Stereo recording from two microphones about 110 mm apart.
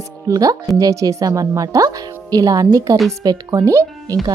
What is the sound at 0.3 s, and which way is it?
Speech, 35° right (ahead or behind).